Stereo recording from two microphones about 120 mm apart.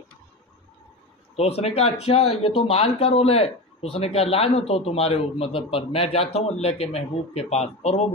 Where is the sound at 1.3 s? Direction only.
60° left (ahead or behind).